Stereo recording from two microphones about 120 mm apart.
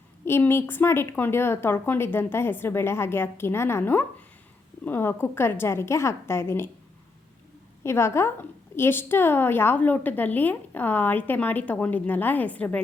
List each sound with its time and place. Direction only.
0.3 s a woman's voice: 20° left (ahead or behind)
7.9 s a woman's voice: 20° left (ahead or behind)